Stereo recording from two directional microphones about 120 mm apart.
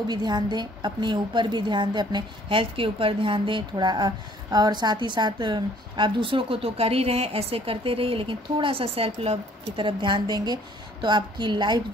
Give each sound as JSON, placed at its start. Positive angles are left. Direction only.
{"t": 0.1, "sound": "a woman's voice", "side_deg": -35}